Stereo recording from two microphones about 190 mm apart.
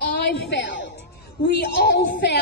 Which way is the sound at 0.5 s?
70° left (ahead or behind).